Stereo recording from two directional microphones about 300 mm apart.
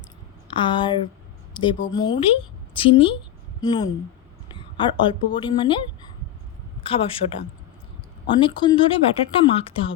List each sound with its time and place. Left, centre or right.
0.5 s a woman's voice: centre
6.8 s speech: centre
8.4 s speech: centre